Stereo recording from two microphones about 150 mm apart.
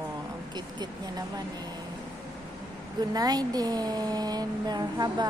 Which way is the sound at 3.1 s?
25° right (ahead or behind).